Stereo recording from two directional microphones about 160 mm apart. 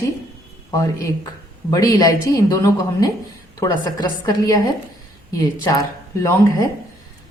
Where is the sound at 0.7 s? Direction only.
25° left (ahead or behind).